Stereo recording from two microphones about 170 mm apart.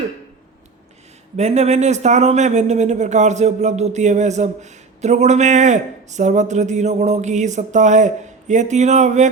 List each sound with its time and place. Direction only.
1.4 s speech: 40° right (ahead or behind)